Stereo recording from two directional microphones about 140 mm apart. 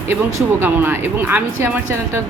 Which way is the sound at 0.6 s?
15° right (ahead or behind).